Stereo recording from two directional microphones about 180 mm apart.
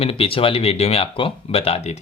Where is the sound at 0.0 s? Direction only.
30° left (ahead or behind).